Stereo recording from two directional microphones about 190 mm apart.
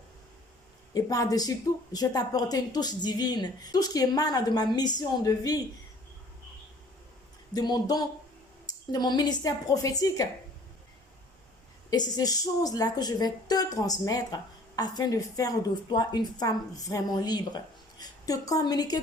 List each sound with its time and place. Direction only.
0.9 s speech: 20° left (ahead or behind)
7.5 s speech: 20° left (ahead or behind)
11.9 s speech: 20° left (ahead or behind)